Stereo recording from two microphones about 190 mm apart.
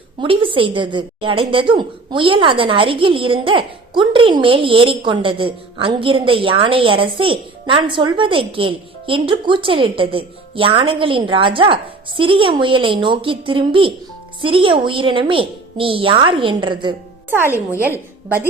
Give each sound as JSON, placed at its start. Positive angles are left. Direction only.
{"t": 0.2, "sound": "a woman's voice", "side_deg": -25}
{"t": 17.7, "sound": "a woman's voice", "side_deg": -10}